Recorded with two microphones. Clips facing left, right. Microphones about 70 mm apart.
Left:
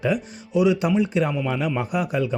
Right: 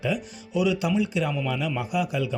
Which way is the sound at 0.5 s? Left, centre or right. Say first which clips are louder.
Left 4 dB; left.